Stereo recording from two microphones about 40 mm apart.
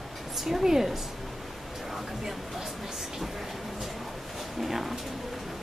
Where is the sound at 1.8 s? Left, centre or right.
Centre.